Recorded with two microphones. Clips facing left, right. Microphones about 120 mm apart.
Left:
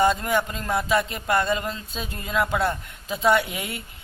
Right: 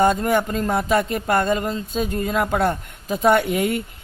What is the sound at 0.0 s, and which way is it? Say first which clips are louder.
Speech: right 3 dB; 45° right (ahead or behind).